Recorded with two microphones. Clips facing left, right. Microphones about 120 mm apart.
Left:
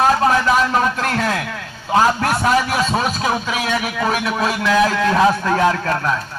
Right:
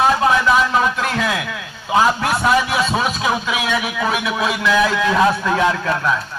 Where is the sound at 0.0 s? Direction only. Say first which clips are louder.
Even; 40° left (ahead or behind).